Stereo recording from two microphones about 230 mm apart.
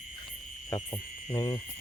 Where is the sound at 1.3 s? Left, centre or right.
Centre.